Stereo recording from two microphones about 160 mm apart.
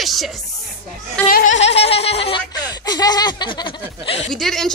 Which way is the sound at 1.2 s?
55° left (ahead or behind).